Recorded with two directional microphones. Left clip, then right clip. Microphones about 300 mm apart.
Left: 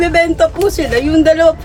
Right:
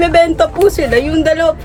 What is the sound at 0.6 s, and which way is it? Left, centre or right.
Speech, centre.